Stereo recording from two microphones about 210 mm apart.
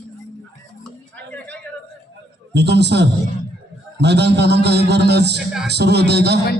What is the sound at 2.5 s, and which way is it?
A man's voice, 55° right (ahead or behind).